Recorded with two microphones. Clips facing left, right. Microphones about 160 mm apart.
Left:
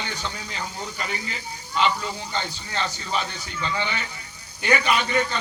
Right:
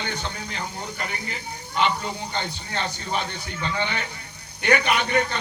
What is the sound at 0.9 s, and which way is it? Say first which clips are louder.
A man's voice: left 1 dB; 55° right (ahead or behind).